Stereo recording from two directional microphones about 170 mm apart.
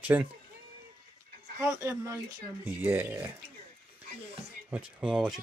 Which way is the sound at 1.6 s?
20° right (ahead or behind).